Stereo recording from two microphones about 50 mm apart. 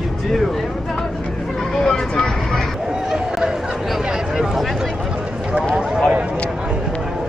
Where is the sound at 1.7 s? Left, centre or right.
Centre.